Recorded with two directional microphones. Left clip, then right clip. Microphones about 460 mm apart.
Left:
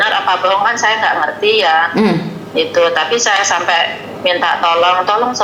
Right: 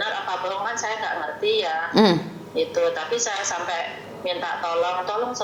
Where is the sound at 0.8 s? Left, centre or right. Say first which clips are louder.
Left 14 dB; centre.